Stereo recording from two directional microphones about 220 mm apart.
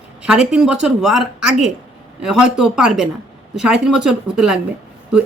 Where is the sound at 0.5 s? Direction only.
5° right (ahead or behind).